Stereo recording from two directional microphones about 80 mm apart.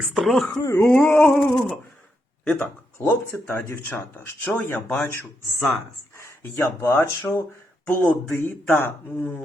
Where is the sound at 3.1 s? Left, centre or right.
Left.